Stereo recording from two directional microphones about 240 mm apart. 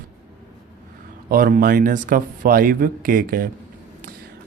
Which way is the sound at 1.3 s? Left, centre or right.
Right.